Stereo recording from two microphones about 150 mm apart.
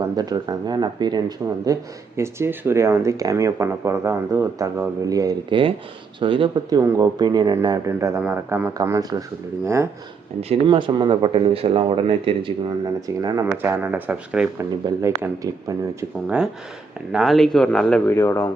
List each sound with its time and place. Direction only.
0.2 s speech: 25° right (ahead or behind); by 8.7 s 10° right (ahead or behind)
8.8 s speech: 25° right (ahead or behind)
10.5 s speech: 35° right (ahead or behind)
13.2 s speech: 25° right (ahead or behind)
17.1 s speech: centre (ahead or behind)
18.0 s speech: 15° left (ahead or behind)